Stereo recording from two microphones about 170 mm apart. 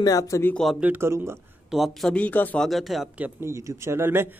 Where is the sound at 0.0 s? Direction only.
20° left (ahead or behind).